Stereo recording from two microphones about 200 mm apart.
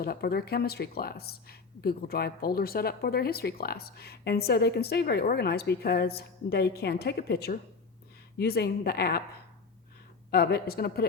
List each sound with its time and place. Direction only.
0.0 s speech: 50° left (ahead or behind)
10.3 s speech: 50° left (ahead or behind)